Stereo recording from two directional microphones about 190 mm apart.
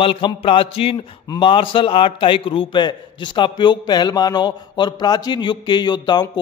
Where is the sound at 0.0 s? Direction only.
30° left (ahead or behind).